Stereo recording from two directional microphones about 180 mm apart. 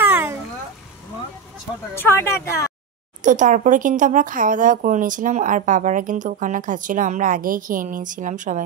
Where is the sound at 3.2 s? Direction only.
45° right (ahead or behind).